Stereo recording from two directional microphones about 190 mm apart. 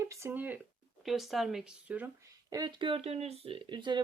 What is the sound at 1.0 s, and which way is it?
Speech, centre (ahead or behind).